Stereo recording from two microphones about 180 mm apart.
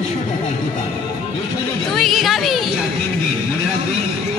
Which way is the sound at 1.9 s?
Centre (ahead or behind).